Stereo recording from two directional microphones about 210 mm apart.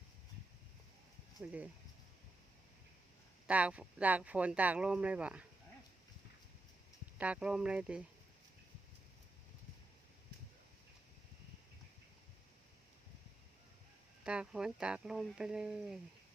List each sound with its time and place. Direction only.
1.4 s speech: 5° right (ahead or behind)
3.4 s speech: 5° right (ahead or behind)
7.2 s speech: 5° right (ahead or behind)
14.3 s speech: 5° right (ahead or behind)